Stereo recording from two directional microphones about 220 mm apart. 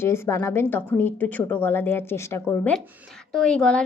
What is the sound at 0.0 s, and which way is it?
A woman's voice, 10° left (ahead or behind).